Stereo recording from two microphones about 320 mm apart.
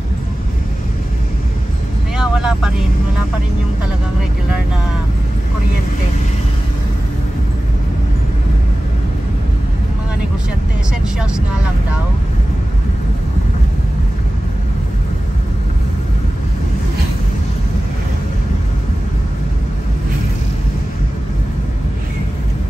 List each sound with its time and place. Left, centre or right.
2.1 s vehicle: centre